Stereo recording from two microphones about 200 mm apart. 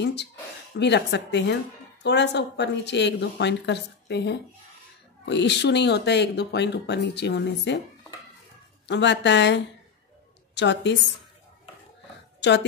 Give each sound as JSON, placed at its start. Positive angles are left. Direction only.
{"t": 0.0, "sound": "speech", "side_deg": 60}
{"t": 8.8, "sound": "a woman's voice", "side_deg": 60}
{"t": 12.4, "sound": "a woman's voice", "side_deg": 60}